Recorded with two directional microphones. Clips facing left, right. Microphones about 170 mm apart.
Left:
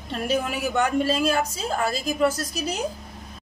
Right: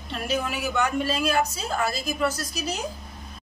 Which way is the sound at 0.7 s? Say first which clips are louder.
Left 3 dB; 40° left (ahead or behind).